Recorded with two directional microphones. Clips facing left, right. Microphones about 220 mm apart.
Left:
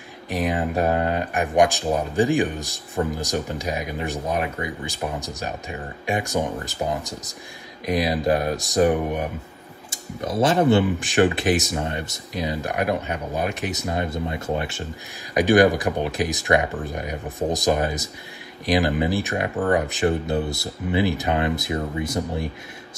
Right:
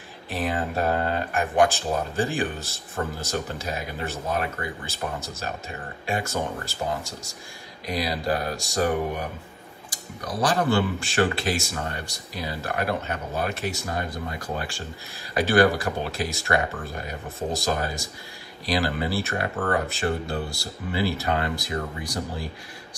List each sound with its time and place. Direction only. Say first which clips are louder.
0.3 s speech: left 4 dB; 15° left (ahead or behind)
7.8 s speech: left 6 dB; 20° left (ahead or behind)